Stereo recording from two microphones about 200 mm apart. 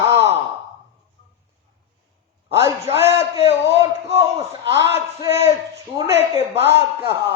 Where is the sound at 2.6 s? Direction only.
10° right (ahead or behind).